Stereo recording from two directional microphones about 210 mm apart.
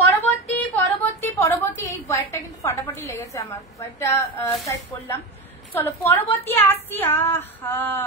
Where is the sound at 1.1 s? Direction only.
10° left (ahead or behind).